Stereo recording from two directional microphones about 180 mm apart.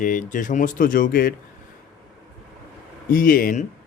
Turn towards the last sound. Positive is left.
turn(degrees=50)  # may be behind; listen again after turning